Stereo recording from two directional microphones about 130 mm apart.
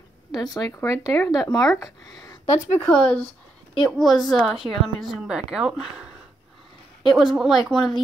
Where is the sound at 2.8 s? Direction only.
5° left (ahead or behind).